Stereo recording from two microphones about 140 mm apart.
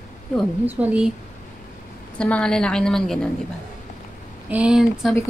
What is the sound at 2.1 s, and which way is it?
A woman's voice, 10° left (ahead or behind).